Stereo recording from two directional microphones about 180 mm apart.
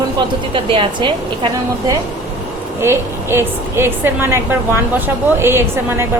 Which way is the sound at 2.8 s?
15° right (ahead or behind).